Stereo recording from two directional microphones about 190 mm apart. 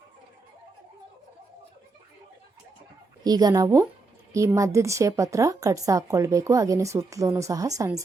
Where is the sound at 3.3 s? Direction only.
20° right (ahead or behind).